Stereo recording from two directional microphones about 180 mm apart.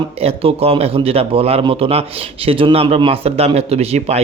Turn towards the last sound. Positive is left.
turn(degrees=-35)  # may be behind; listen again after turning